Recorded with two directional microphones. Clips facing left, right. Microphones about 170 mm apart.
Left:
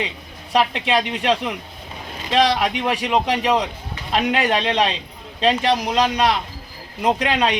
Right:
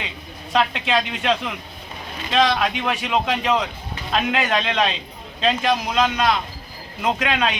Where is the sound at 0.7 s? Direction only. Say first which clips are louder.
Left 2 dB; 30° left (ahead or behind).